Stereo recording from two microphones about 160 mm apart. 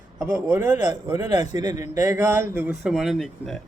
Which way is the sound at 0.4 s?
15° right (ahead or behind).